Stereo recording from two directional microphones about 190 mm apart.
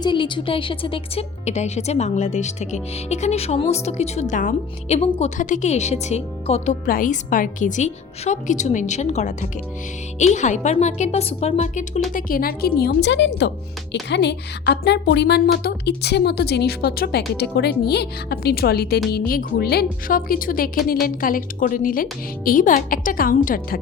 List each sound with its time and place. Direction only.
0.0 s a woman's voice: 25° left (ahead or behind)
6.8 s a woman's voice: 45° left (ahead or behind)